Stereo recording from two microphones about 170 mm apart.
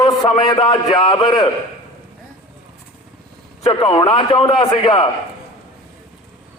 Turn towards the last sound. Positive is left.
turn(degrees=30)  # may be behind; listen again after turning